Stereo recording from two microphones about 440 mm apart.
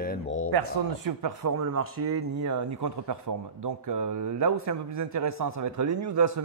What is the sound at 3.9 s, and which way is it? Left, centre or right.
A man's voice, right.